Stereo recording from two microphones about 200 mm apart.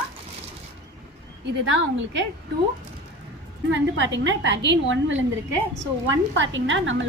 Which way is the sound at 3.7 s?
65° right (ahead or behind).